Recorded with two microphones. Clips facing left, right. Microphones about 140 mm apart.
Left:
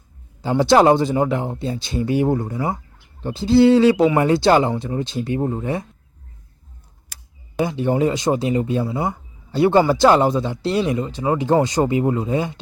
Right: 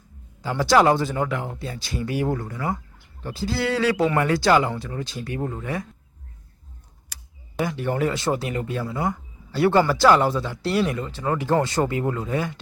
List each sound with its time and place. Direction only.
0.4 s speech: 25° left (ahead or behind)
7.6 s speech: 20° left (ahead or behind)